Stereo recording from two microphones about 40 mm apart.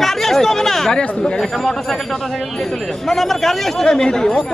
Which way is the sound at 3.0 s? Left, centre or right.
Centre.